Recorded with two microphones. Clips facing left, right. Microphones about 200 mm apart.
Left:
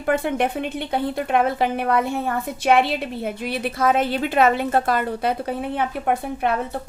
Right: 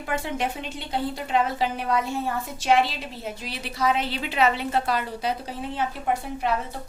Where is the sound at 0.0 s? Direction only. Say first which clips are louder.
Left 7 dB; 55° left (ahead or behind).